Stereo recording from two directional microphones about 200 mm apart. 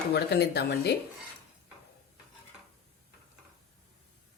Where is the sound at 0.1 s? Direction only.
55° left (ahead or behind).